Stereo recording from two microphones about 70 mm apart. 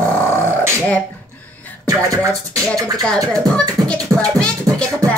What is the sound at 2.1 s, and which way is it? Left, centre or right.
Music, right.